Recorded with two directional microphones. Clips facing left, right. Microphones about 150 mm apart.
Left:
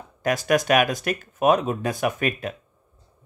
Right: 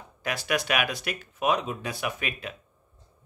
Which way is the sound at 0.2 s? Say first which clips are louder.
Left 8 dB; 45° left (ahead or behind).